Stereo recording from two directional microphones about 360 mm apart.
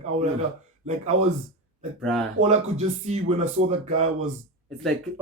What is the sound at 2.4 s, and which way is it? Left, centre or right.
Speech, centre.